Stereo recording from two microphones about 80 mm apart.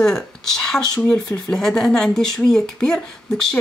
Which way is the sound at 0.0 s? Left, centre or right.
Centre.